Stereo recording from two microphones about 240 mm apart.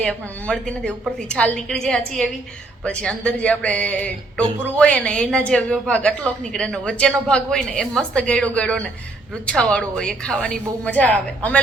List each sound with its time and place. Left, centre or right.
0.0 s a woman's voice: centre